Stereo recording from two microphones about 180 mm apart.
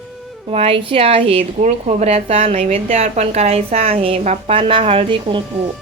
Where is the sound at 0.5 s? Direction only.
30° right (ahead or behind).